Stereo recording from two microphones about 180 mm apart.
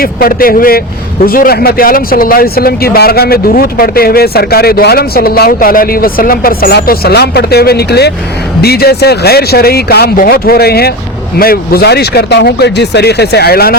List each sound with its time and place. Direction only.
0.0 s speech: 55° left (ahead or behind)